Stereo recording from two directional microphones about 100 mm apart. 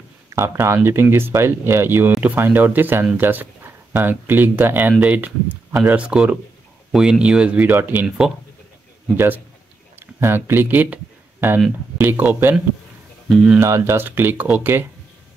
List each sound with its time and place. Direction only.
0.3 s speech: 25° right (ahead or behind)
12.0 s speech: 20° right (ahead or behind)
13.3 s speech: 5° right (ahead or behind)
13.6 s speech: 30° right (ahead or behind)